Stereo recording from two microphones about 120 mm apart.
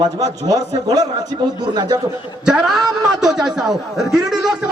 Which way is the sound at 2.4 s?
5° right (ahead or behind).